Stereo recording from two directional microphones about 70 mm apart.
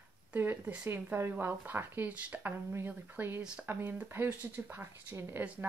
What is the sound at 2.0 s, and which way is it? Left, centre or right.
Speech, right.